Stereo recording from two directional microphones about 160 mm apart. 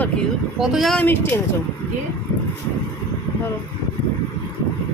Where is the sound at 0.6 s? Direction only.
Centre (ahead or behind).